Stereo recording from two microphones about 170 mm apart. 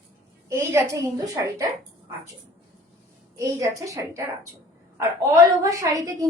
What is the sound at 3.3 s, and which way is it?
A woman's voice, 20° right (ahead or behind).